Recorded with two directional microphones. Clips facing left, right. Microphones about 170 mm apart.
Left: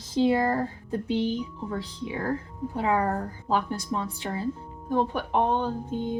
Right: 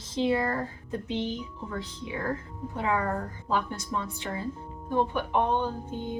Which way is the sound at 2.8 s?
35° left (ahead or behind).